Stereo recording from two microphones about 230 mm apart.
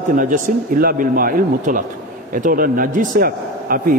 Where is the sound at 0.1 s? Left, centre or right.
Right.